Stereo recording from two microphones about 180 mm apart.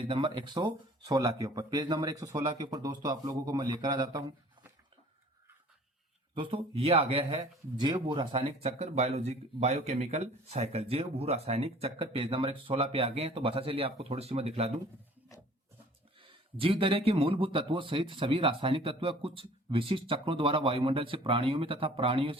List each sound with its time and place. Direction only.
0.0 s speech: 30° right (ahead or behind)
6.3 s speech: 30° right (ahead or behind)
16.6 s speech: 30° right (ahead or behind)